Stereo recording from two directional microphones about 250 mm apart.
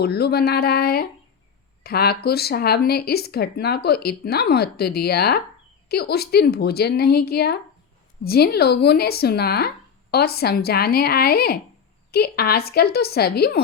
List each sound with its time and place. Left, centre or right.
0.0 s speech: left